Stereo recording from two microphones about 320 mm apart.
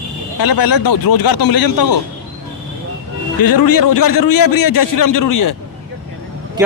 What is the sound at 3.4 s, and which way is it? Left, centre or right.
Speech, left.